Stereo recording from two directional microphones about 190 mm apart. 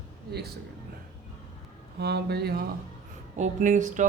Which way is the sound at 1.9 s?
60° right (ahead or behind).